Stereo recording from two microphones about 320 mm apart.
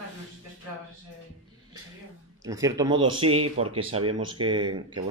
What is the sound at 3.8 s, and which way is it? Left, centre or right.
Speech, centre.